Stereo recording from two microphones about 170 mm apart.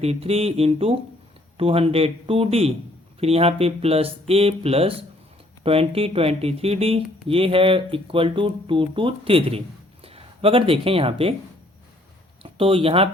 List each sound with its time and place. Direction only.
0.0 s speech: 35° right (ahead or behind)
12.4 s speech: 35° right (ahead or behind)